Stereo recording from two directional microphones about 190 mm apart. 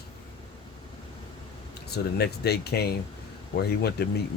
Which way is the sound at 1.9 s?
60° left (ahead or behind).